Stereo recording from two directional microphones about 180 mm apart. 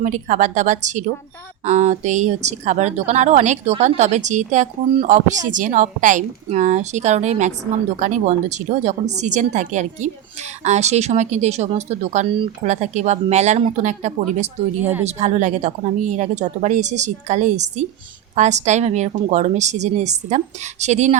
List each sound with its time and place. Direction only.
0.0 s a woman's voice: 45° right (ahead or behind)
14.8 s speech: 10° right (ahead or behind)
15.0 s a woman's voice: 40° right (ahead or behind)